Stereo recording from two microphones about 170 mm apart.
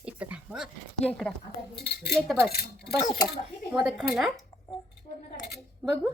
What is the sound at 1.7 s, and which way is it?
Speech, 70° left (ahead or behind).